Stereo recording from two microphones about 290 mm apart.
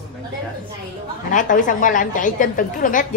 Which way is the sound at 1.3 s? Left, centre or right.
Left.